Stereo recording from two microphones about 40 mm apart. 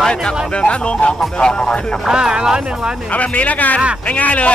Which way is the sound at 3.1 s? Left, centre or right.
Left.